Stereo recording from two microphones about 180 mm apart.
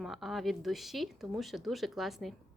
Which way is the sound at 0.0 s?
Centre (ahead or behind).